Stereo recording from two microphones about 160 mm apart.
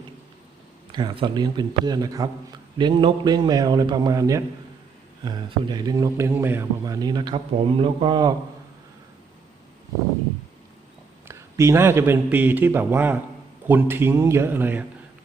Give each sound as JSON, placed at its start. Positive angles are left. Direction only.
{"t": 0.9, "sound": "a man's voice", "side_deg": -30}
{"t": 11.3, "sound": "speech", "side_deg": -15}